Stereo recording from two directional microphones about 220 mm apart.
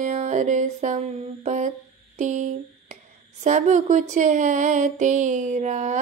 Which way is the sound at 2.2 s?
35° right (ahead or behind).